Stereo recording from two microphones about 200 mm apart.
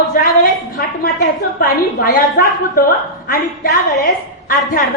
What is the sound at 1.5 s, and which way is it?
A woman's voice, 50° left (ahead or behind).